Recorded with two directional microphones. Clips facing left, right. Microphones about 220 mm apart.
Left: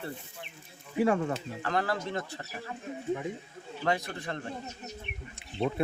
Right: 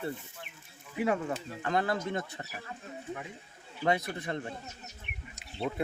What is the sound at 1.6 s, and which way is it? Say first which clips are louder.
Speech: right 1 dB; 20° right (ahead or behind).